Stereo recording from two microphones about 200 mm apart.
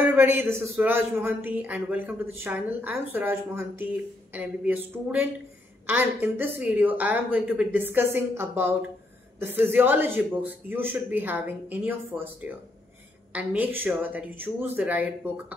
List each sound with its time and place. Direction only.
0.0 s speech: 10° right (ahead or behind)